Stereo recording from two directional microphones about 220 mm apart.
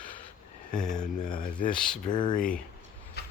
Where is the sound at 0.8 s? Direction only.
5° left (ahead or behind).